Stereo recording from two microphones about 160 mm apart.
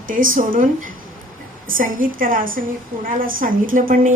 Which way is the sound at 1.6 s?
60° right (ahead or behind).